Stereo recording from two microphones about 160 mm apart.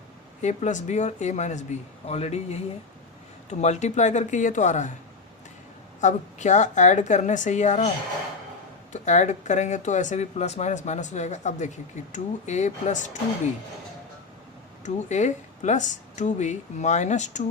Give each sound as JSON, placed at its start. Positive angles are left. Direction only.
{"t": 0.4, "sound": "speech", "side_deg": 50}
{"t": 3.6, "sound": "speech", "side_deg": 45}
{"t": 6.0, "sound": "speech", "side_deg": 50}
{"t": 8.9, "sound": "speech", "side_deg": 50}
{"t": 14.8, "sound": "speech", "side_deg": 45}